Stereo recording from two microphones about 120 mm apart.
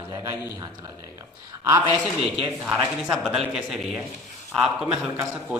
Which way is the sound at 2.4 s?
10° right (ahead or behind).